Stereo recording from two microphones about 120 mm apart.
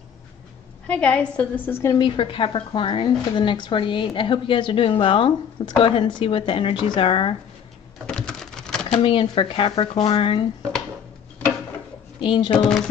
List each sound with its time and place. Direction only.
0.8 s a woman's voice: 10° left (ahead or behind)
2.0 s speech: 45° left (ahead or behind)
8.1 s typing: 5° left (ahead or behind)
9.0 s speech: 45° left (ahead or behind)
12.2 s speech: 45° left (ahead or behind)
12.6 s music: 5° left (ahead or behind)